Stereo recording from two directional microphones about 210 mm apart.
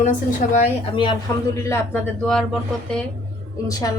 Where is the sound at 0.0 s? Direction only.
35° left (ahead or behind).